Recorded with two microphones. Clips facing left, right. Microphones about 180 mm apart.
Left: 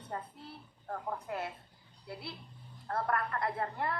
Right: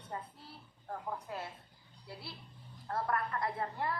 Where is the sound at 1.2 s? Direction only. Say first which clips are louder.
Left 4 dB; 60° left (ahead or behind).